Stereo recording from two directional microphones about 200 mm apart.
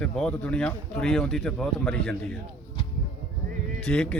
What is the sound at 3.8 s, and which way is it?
Speech, 5° left (ahead or behind).